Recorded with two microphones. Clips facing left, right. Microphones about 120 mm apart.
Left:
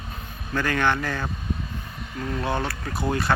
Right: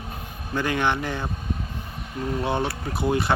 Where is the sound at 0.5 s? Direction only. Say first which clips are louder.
Even; 15° right (ahead or behind).